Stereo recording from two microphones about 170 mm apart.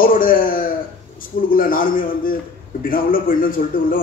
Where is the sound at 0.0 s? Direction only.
55° left (ahead or behind).